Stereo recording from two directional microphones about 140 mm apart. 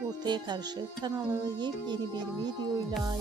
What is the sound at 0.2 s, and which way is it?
Speech, 30° right (ahead or behind).